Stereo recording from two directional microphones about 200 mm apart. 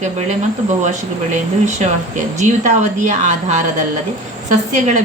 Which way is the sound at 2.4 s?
40° right (ahead or behind).